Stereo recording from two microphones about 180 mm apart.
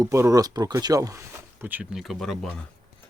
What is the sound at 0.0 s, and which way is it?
Speech, 20° right (ahead or behind).